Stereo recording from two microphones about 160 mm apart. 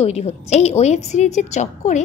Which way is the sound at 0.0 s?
40° left (ahead or behind).